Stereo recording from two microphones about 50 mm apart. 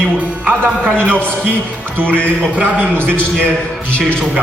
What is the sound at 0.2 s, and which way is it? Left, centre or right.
Speech, right.